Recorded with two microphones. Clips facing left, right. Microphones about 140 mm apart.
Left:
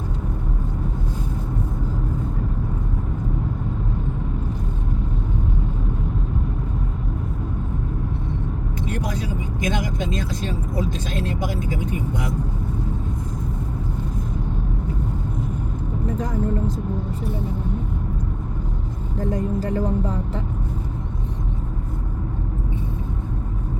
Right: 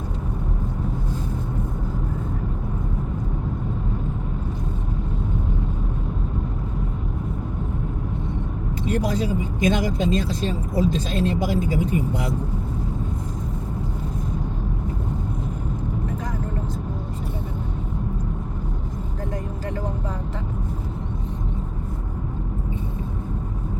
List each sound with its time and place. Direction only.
8.9 s speech: 30° right (ahead or behind)